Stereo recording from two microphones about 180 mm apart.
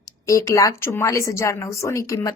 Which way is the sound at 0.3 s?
20° left (ahead or behind).